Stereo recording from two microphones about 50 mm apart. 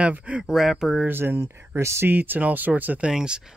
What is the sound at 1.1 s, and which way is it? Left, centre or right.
Speech, right.